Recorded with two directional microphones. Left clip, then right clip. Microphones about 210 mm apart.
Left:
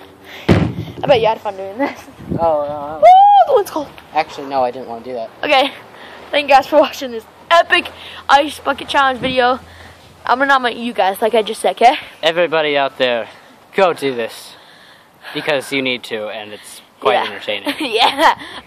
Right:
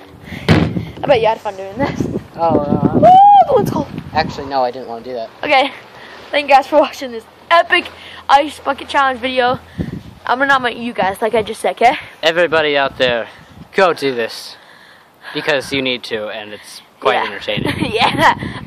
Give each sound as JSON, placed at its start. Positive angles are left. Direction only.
{"t": 0.3, "sound": "door", "side_deg": 5}
{"t": 2.3, "sound": "speech", "side_deg": -30}
{"t": 3.2, "sound": "a sound", "side_deg": 10}
{"t": 4.1, "sound": "speech", "side_deg": -15}
{"t": 5.4, "sound": "a woman's voice", "side_deg": 10}
{"t": 12.2, "sound": "speech", "side_deg": -15}
{"t": 17.6, "sound": "a woman's voice", "side_deg": 0}